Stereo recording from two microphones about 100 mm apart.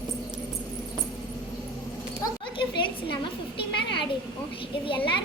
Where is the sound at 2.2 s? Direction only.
55° left (ahead or behind).